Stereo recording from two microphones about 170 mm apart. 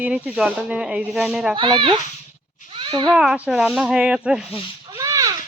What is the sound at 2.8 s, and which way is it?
Babbling, 25° right (ahead or behind).